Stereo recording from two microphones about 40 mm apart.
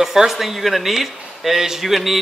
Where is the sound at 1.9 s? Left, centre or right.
Centre.